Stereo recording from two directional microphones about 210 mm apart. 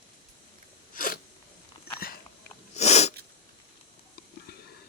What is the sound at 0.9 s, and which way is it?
Sneeze, 40° left (ahead or behind).